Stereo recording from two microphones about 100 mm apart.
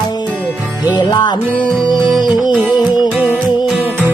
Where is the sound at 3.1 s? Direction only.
15° right (ahead or behind).